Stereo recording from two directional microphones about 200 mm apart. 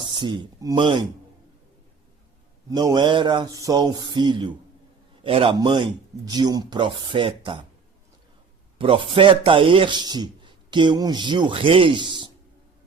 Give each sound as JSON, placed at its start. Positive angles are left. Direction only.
{"t": 0.0, "sound": "speech", "side_deg": -25}
{"t": 2.6, "sound": "speech", "side_deg": -20}
{"t": 8.8, "sound": "speech", "side_deg": -25}